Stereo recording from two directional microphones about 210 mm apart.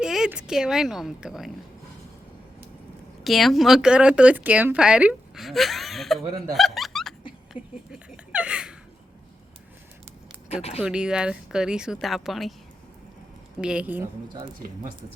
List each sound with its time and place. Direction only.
0.0 s a woman's voice: 5° right (ahead or behind)
3.2 s speech: centre (ahead or behind)
7.5 s a sound: 5° right (ahead or behind)
10.5 s speech: 30° left (ahead or behind)
10.8 s speech: 5° right (ahead or behind)
13.6 s a woman's voice: 5° right (ahead or behind)